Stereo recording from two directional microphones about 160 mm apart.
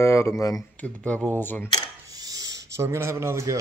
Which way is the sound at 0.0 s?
20° left (ahead or behind).